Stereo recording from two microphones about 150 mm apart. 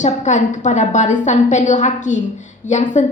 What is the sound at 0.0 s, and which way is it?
A woman's voice, 55° left (ahead or behind).